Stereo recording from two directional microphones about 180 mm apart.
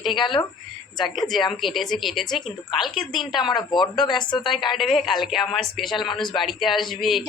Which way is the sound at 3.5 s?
25° left (ahead or behind).